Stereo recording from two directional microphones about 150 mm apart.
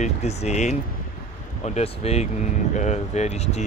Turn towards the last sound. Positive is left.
turn(degrees=45)  # may be behind; listen again after turning